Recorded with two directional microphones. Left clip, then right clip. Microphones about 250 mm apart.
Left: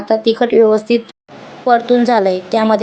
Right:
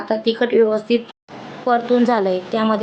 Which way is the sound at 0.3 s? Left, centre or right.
Centre.